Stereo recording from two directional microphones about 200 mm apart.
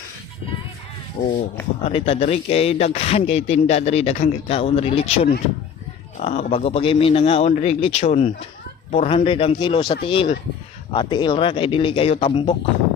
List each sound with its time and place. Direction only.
1.2 s a man's voice: 25° left (ahead or behind)